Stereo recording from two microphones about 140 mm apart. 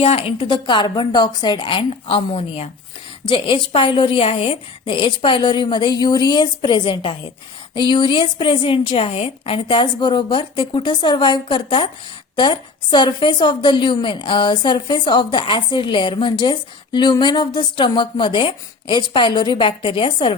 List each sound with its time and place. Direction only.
0.0 s a woman's voice: 45° left (ahead or behind)